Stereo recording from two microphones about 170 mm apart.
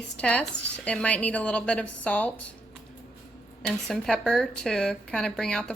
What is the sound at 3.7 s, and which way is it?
A woman's voice, 5° left (ahead or behind).